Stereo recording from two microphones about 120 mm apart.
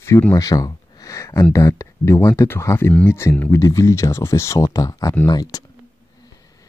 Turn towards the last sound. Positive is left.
turn(degrees=30)  # may be behind; listen again after turning